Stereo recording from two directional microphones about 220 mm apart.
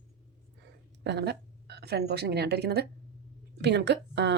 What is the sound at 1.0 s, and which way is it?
A woman's voice, 50° right (ahead or behind).